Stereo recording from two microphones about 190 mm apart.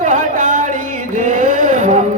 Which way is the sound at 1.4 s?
45° right (ahead or behind).